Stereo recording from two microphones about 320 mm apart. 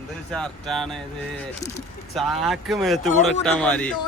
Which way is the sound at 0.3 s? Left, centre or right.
Centre.